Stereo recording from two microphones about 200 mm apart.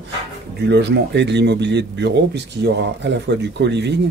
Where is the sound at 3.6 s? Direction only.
60° right (ahead or behind).